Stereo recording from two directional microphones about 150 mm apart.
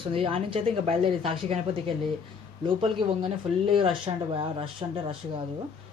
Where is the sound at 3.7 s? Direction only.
40° right (ahead or behind).